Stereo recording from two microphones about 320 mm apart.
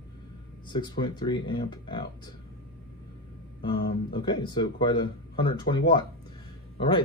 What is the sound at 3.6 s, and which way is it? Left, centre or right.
Speech, centre.